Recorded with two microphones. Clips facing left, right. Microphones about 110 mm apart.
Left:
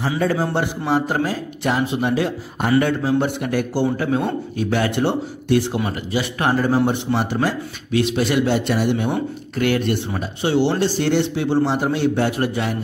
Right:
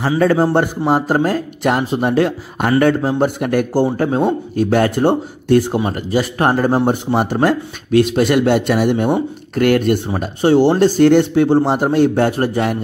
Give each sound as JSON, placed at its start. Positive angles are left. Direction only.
{"t": 0.2, "sound": "a man's voice", "side_deg": -55}
{"t": 0.5, "sound": "speech", "side_deg": -45}
{"t": 2.8, "sound": "speech", "side_deg": -50}